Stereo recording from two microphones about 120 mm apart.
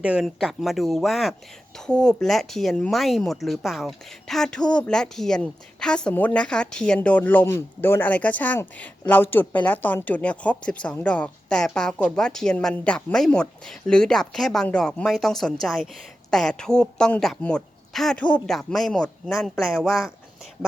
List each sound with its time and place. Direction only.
0.0 s speech: 10° right (ahead or behind)